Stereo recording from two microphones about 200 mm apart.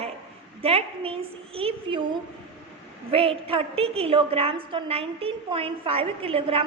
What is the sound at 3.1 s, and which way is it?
A woman's voice, 25° right (ahead or behind).